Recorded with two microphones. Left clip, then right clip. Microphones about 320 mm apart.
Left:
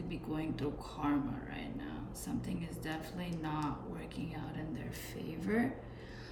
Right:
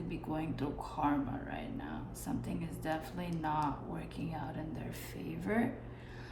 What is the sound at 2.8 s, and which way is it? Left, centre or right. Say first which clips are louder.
Speech: right 5 dB; centre.